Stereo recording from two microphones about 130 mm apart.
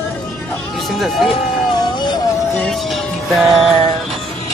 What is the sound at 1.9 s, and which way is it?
Music, 35° left (ahead or behind).